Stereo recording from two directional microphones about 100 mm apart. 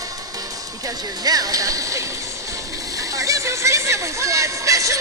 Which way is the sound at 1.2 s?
40° right (ahead or behind).